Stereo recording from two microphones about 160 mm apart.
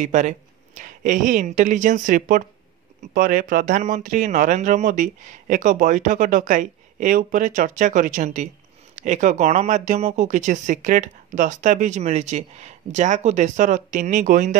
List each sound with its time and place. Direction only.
0.0 s speech: 50° right (ahead or behind)